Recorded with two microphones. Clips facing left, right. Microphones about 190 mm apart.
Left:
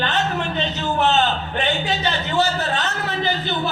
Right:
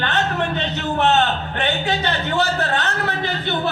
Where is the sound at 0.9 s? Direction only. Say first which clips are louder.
Right 1 dB; 60° right (ahead or behind).